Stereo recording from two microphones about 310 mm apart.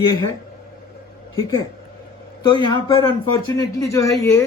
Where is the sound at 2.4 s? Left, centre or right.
Centre.